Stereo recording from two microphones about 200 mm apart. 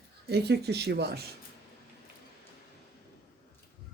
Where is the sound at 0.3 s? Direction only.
55° right (ahead or behind).